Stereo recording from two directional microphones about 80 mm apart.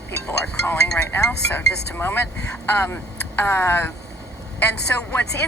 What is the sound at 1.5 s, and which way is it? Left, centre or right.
A woman's voice, left.